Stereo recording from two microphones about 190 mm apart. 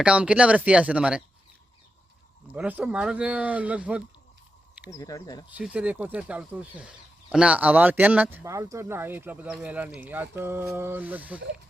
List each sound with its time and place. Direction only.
0.0 s speech: 5° right (ahead or behind)
2.5 s speech: 10° right (ahead or behind)
4.9 s speech: 20° left (ahead or behind)
5.5 s speech: 5° right (ahead or behind)